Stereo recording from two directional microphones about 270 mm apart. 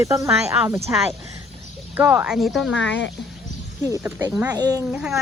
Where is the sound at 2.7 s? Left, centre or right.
Left.